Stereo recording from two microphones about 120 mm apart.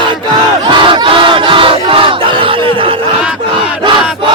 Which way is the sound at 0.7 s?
40° right (ahead or behind).